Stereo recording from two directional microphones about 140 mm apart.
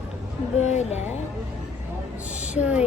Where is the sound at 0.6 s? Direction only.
55° left (ahead or behind).